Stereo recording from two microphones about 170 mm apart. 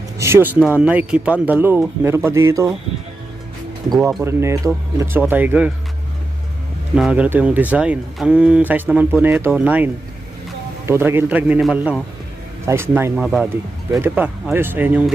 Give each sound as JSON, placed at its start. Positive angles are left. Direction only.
{"t": 0.2, "sound": "speech", "side_deg": -15}
{"t": 4.2, "sound": "speech", "side_deg": -15}
{"t": 6.9, "sound": "speech", "side_deg": -5}
{"t": 13.1, "sound": "speech", "side_deg": -5}